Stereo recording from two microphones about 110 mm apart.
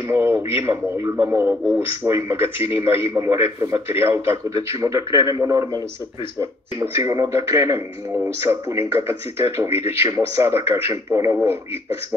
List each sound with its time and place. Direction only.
0.1 s a man's voice: 20° right (ahead or behind)
1.1 s speech: 10° right (ahead or behind)
1.4 s a man's voice: 20° right (ahead or behind)
6.8 s a man's voice: 35° right (ahead or behind)